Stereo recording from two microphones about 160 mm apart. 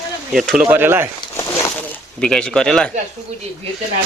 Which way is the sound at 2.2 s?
5° left (ahead or behind).